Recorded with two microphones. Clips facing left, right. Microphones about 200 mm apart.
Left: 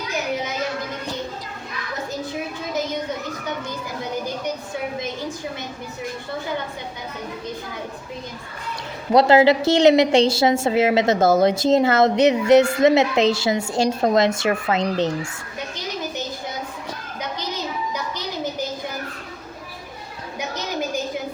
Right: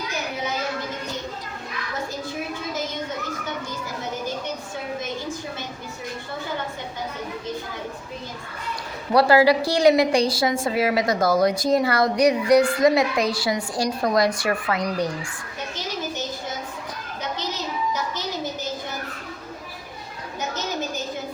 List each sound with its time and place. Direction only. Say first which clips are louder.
9.1 s a woman's voice: left 2 dB; 25° left (ahead or behind)